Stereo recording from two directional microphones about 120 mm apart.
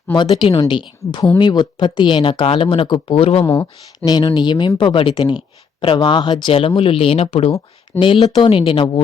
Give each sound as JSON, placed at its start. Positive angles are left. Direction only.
{"t": 0.2, "sound": "speech", "side_deg": 40}
{"t": 3.4, "sound": "speech", "side_deg": 25}
{"t": 7.9, "sound": "speech", "side_deg": 45}